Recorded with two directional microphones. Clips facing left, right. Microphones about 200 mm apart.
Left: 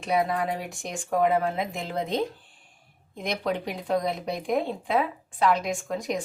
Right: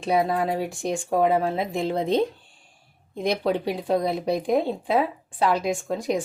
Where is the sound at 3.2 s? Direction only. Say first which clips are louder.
Right 5 dB; 30° right (ahead or behind).